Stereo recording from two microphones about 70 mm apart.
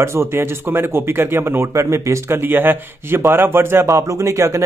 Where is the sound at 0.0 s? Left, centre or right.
Right.